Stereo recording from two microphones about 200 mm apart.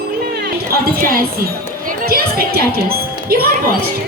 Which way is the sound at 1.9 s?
50° right (ahead or behind).